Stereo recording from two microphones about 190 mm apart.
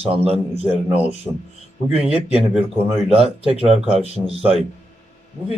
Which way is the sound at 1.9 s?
30° right (ahead or behind).